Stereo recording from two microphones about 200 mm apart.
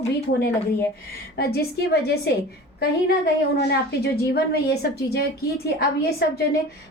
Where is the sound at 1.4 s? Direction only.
50° left (ahead or behind).